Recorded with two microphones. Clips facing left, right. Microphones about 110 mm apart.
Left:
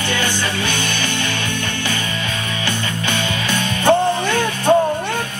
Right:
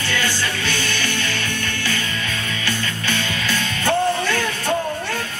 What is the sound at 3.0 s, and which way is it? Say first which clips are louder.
Music: left 2 dB; 20° left (ahead or behind).